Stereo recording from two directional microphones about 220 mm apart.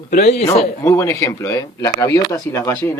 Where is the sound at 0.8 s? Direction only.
10° left (ahead or behind).